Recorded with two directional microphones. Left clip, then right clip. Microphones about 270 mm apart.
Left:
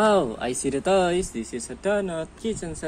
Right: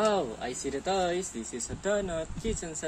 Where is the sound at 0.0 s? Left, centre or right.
Left.